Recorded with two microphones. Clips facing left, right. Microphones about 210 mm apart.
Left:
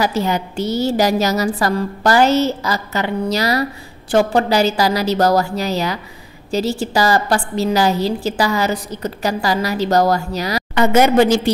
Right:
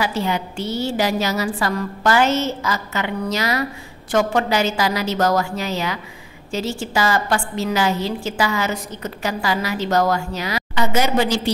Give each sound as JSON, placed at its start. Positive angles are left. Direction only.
{"t": 0.0, "sound": "a woman's voice", "side_deg": 40}
{"t": 10.7, "sound": "a woman's voice", "side_deg": 55}